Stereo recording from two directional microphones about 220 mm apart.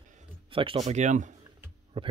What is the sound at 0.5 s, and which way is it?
Speech, 25° right (ahead or behind).